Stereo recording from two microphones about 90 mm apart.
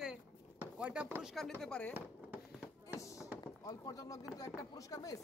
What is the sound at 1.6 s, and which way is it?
Speech, 10° left (ahead or behind).